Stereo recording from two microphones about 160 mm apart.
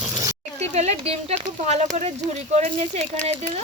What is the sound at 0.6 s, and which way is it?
Speech, 40° right (ahead or behind).